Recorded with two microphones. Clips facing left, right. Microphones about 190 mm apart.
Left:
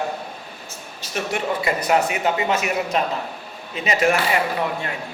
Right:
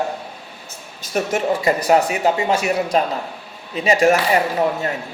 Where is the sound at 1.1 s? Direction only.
40° right (ahead or behind).